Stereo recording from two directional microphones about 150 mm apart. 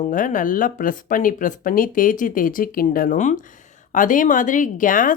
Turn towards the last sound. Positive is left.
turn(degrees=65)  # may be behind; listen again after turning